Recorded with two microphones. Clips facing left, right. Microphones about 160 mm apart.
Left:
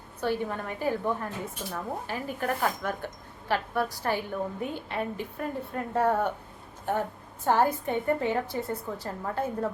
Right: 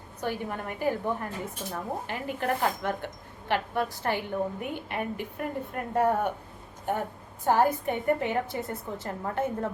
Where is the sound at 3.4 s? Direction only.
20° right (ahead or behind).